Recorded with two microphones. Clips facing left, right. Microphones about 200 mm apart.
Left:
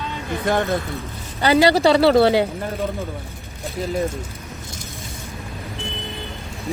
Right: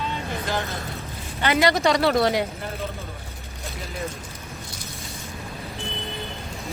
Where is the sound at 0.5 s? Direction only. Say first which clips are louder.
Left 8 dB; 60° left (ahead or behind).